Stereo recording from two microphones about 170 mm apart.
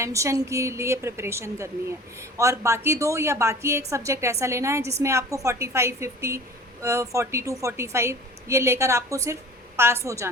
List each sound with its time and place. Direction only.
0.0 s a woman's voice: 15° right (ahead or behind)